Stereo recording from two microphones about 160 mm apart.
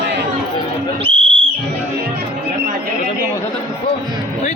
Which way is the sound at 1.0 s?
35° right (ahead or behind).